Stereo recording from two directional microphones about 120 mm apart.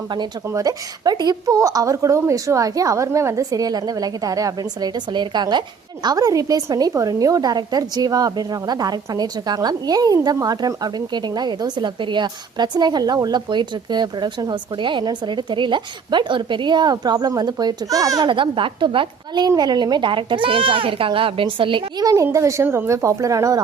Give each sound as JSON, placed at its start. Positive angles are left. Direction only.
{"t": 0.1, "sound": "a woman's voice", "side_deg": -35}
{"t": 18.3, "sound": "a woman's voice", "side_deg": -45}
{"t": 22.0, "sound": "a woman's voice", "side_deg": -25}